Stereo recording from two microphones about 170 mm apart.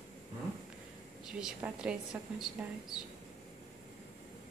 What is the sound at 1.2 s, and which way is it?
A woman's voice, 5° right (ahead or behind).